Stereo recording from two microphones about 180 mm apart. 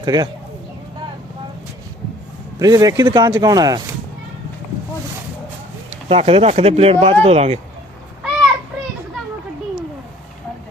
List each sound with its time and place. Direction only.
0.0 s speech: 25° right (ahead or behind)
2.6 s speech: 20° right (ahead or behind)
6.1 s speech: 35° right (ahead or behind)